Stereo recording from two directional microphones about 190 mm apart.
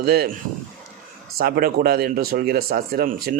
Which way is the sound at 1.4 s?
50° right (ahead or behind).